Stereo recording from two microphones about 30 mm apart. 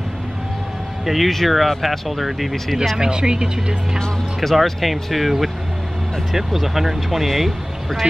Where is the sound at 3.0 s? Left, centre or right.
Right.